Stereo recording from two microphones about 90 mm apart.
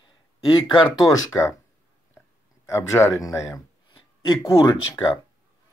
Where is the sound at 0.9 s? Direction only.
40° left (ahead or behind).